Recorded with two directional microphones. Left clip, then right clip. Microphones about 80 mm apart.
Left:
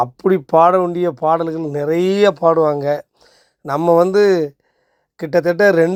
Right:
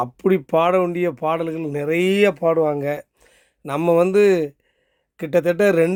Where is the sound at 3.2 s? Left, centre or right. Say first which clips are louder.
Left 3 dB; right.